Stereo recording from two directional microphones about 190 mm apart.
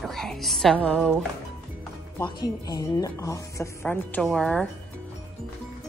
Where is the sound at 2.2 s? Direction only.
20° left (ahead or behind); by 4.6 s 5° left (ahead or behind).